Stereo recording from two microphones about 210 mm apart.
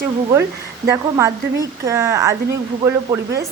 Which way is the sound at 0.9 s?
15° right (ahead or behind).